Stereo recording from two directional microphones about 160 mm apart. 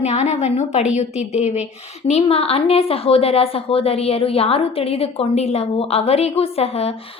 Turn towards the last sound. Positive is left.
turn(degrees=40)  # may be behind; listen again after turning